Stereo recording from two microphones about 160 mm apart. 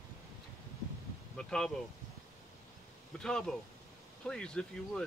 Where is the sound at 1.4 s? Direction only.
5° left (ahead or behind).